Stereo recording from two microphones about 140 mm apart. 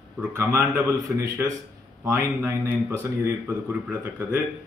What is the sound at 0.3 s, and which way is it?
A man's voice, 15° right (ahead or behind).